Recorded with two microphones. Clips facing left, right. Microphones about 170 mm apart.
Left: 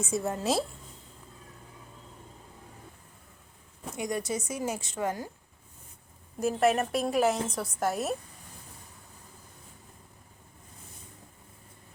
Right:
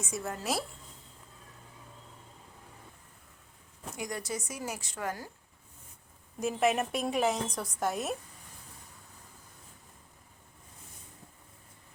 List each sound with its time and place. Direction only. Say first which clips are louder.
0.0 s a woman's voice: left 6 dB; 25° left (ahead or behind)
3.9 s a woman's voice: left 5 dB; 20° left (ahead or behind)
6.4 s a woman's voice: left 3 dB; centre (ahead or behind)